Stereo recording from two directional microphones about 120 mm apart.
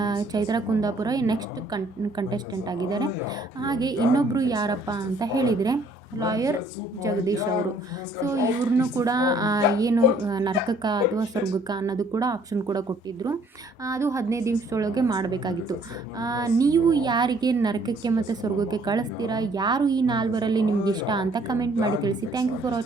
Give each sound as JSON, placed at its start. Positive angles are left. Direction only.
{"t": 0.0, "sound": "a woman's voice", "side_deg": -35}
{"t": 13.8, "sound": "a woman's voice", "side_deg": -25}